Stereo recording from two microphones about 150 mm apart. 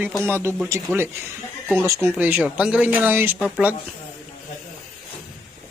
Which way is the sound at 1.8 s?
20° right (ahead or behind).